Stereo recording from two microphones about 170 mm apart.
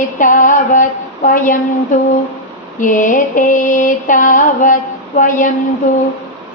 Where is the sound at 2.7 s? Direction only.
50° left (ahead or behind).